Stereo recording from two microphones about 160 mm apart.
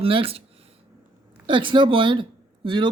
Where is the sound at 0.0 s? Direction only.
35° right (ahead or behind).